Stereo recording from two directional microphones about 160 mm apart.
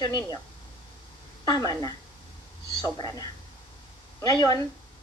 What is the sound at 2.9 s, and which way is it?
A woman's voice, 25° left (ahead or behind).